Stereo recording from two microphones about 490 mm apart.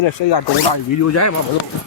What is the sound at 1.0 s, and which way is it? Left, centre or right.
Speech, left.